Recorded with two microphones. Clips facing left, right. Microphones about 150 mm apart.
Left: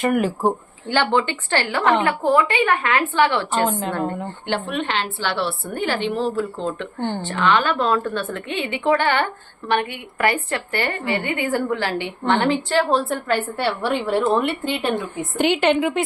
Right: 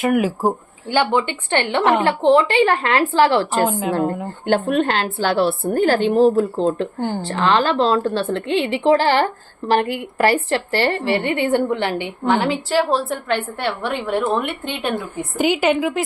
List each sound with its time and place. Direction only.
0.0 s speech: 5° right (ahead or behind)
0.9 s a woman's voice: 20° right (ahead or behind); by 3.4 s 35° right (ahead or behind)
3.5 s a woman's voice: 5° right (ahead or behind)
4.4 s a woman's voice: 45° right (ahead or behind); by 12.3 s 15° right (ahead or behind)
12.3 s a woman's voice: 5° right (ahead or behind)